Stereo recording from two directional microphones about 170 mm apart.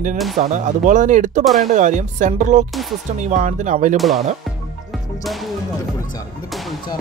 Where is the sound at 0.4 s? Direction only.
45° right (ahead or behind).